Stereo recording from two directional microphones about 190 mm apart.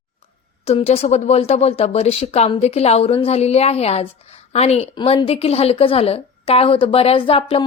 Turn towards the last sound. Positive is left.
turn(degrees=30)  # may be behind; listen again after turning